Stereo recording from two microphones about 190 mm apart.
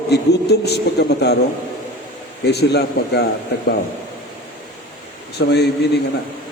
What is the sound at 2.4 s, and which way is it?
Speech, 60° left (ahead or behind).